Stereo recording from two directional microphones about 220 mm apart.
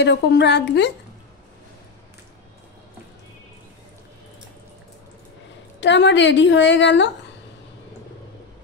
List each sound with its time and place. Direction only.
0.0 s a woman's voice: 50° left (ahead or behind)
5.8 s a woman's voice: 55° left (ahead or behind)